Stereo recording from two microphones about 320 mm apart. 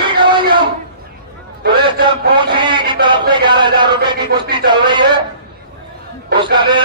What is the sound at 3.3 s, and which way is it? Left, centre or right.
A man's voice, centre.